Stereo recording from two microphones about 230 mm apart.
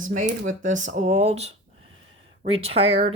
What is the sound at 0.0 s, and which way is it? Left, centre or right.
Speech, right.